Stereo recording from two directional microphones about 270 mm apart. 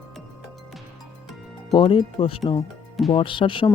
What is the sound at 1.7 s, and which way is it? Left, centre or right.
Speech, centre.